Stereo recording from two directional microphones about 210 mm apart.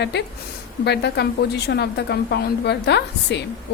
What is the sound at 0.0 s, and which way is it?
A woman's voice, 55° left (ahead or behind).